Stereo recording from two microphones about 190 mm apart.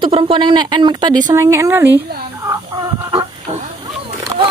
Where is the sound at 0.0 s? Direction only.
25° right (ahead or behind).